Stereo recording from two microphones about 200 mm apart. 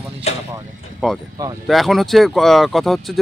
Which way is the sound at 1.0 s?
5° right (ahead or behind).